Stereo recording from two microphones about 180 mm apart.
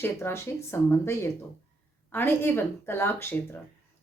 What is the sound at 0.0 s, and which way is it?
A woman's voice, 15° left (ahead or behind).